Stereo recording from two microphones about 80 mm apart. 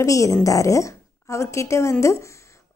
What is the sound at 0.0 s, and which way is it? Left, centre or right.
A woman's voice, left.